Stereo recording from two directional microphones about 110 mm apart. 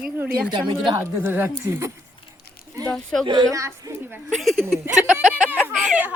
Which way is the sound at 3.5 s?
30° right (ahead or behind).